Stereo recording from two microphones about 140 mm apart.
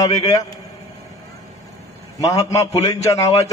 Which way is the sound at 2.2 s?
25° left (ahead or behind).